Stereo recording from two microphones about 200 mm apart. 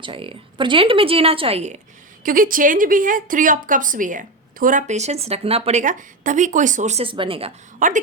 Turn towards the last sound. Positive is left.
turn(degrees=-40)  # may be behind; listen again after turning